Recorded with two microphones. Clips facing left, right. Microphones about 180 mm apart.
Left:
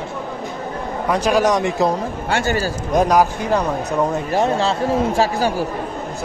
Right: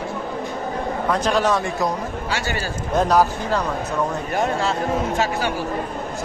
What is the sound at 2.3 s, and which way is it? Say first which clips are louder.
Speech: left 8 dB; 50° left (ahead or behind).